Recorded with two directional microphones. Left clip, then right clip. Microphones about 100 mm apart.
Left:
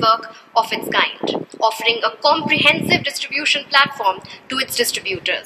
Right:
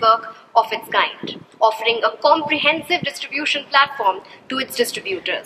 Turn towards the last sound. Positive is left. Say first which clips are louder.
# left 2 dB
turn(degrees=20)  # may be behind; listen again after turning